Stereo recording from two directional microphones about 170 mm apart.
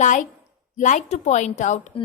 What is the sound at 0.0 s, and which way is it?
A woman's voice, 45° left (ahead or behind).